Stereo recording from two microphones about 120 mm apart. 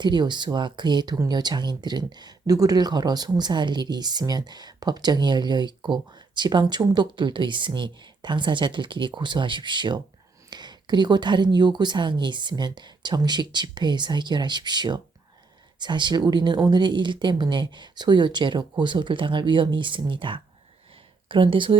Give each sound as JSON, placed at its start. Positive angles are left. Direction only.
{"t": 0.0, "sound": "speech", "side_deg": -40}